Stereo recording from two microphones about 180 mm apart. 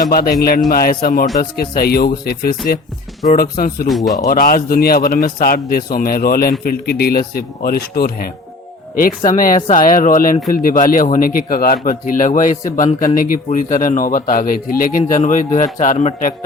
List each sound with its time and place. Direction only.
0.0 s speech: 55° left (ahead or behind)
3.8 s a man's voice: centre (ahead or behind)
4.3 s speech: 55° left (ahead or behind)
12.8 s speech: 20° left (ahead or behind)
13.1 s speech: 50° left (ahead or behind)